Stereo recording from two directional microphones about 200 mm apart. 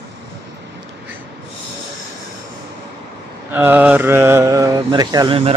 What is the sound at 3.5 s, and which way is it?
Speech, 10° right (ahead or behind).